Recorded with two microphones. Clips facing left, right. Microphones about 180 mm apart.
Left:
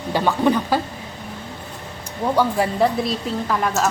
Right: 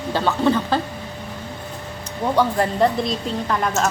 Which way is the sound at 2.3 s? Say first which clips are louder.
Even; 5° left (ahead or behind).